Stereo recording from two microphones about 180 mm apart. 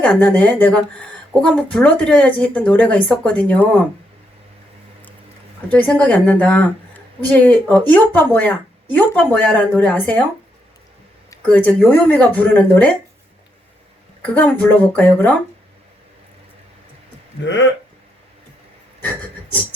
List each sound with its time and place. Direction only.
0.0 s a woman's voice: 5° left (ahead or behind)
5.6 s a woman's voice: 10° left (ahead or behind)
11.4 s a woman's voice: 10° left (ahead or behind)
14.2 s a woman's voice: 10° left (ahead or behind)
17.4 s speech: 80° left